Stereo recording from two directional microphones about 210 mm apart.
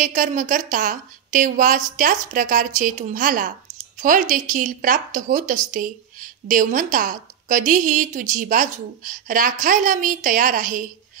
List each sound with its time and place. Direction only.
0.0 s a woman's voice: 40° right (ahead or behind)